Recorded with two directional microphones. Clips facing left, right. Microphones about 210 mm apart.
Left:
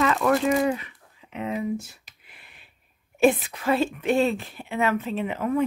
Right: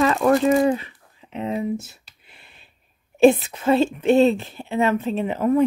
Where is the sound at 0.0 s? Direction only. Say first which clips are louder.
Right 4 dB; 35° right (ahead or behind).